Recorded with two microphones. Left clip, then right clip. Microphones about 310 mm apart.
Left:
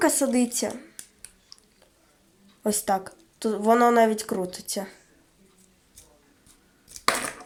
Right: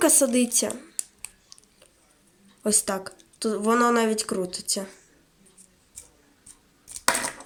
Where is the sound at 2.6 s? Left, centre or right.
Centre.